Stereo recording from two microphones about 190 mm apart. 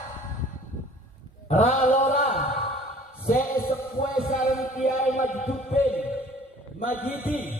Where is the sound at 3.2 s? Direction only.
50° left (ahead or behind).